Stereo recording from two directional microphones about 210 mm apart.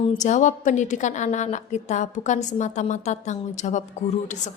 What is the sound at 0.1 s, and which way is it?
Speech, 35° left (ahead or behind).